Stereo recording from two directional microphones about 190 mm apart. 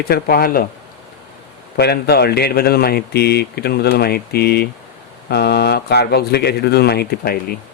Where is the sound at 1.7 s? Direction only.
55° left (ahead or behind).